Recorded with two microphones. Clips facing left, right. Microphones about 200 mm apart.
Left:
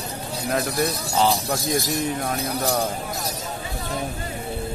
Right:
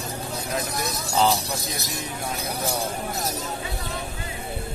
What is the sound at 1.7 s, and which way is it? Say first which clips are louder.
Speech: left 9 dB; 50° left (ahead or behind).